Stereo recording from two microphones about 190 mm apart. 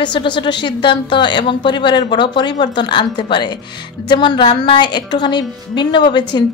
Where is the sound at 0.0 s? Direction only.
25° left (ahead or behind).